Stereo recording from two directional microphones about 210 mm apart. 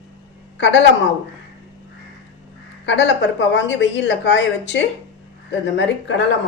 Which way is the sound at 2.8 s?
60° left (ahead or behind).